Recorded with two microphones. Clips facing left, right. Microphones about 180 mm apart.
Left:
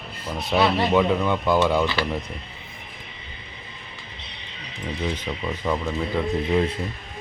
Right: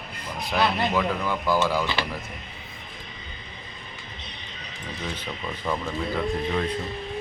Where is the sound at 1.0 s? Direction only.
25° left (ahead or behind).